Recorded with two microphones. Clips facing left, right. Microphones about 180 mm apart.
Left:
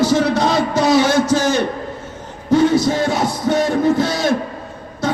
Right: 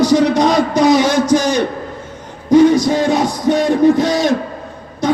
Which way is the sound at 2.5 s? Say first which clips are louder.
Right 4 dB; 15° right (ahead or behind).